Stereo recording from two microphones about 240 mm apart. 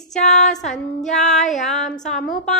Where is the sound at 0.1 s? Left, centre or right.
Centre.